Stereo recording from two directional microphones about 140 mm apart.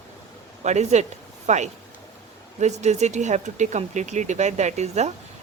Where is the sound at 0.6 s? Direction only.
55° right (ahead or behind).